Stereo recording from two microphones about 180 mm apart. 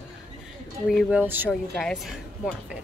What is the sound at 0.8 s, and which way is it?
Speech, 5° right (ahead or behind).